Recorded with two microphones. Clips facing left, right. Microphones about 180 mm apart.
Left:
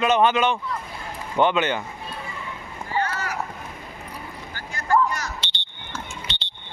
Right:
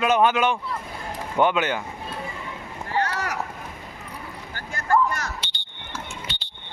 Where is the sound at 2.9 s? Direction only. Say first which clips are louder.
Right 1 dB; 75° right (ahead or behind).